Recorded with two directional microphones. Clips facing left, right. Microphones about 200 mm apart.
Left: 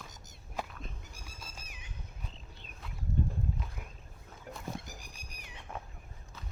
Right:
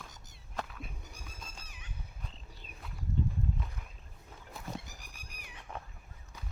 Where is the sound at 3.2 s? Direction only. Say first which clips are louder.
Even; 50° left (ahead or behind).